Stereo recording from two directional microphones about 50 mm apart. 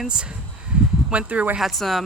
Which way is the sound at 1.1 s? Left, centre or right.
Right.